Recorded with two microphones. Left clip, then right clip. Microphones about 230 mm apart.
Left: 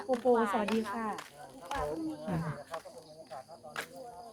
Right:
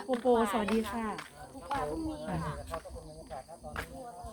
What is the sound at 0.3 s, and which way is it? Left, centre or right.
Speech, right.